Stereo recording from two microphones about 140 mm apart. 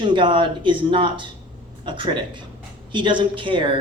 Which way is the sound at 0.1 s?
35° right (ahead or behind).